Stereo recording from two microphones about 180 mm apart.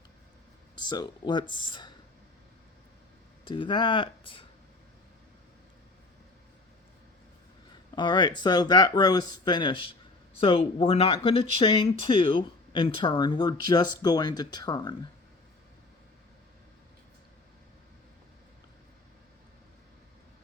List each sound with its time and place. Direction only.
0.8 s speech: 25° left (ahead or behind)
3.4 s speech: 25° left (ahead or behind)
7.9 s speech: 25° left (ahead or behind)